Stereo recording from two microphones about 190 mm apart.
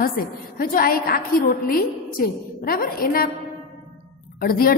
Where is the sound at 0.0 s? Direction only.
50° left (ahead or behind).